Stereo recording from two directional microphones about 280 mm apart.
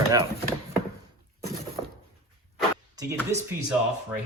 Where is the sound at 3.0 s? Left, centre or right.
Centre.